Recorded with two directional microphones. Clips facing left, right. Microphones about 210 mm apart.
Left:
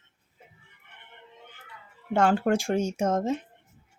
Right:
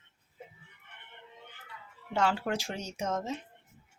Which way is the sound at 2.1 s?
50° left (ahead or behind).